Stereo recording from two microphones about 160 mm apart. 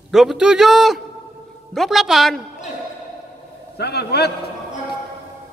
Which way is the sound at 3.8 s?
90° left.